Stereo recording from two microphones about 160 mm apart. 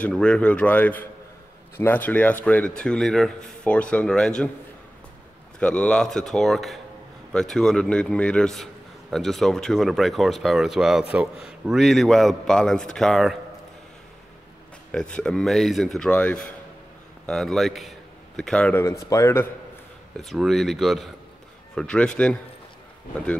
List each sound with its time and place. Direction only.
0.0 s a man's voice: 5° left (ahead or behind)
5.6 s speech: 5° left (ahead or behind)
14.9 s a man's voice: 5° left (ahead or behind)
20.2 s speech: centre (ahead or behind)